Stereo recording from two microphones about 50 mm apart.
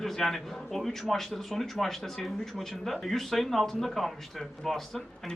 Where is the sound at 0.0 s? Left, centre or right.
Centre.